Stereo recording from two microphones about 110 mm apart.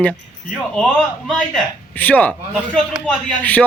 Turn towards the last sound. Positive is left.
turn(degrees=10)  # may be behind; listen again after turning